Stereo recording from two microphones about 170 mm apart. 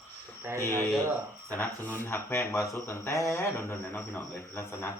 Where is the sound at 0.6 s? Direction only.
15° left (ahead or behind).